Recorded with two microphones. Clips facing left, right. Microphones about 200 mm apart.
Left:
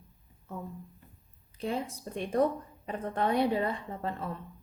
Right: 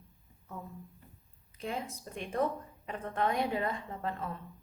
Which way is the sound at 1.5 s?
35° left (ahead or behind).